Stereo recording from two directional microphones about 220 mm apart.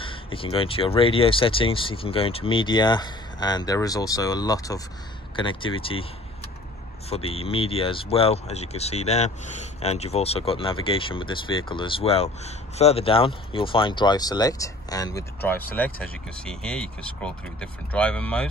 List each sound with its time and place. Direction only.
0.0 s speech: 25° left (ahead or behind)
7.1 s speech: 25° left (ahead or behind); by 18.5 s 5° left (ahead or behind)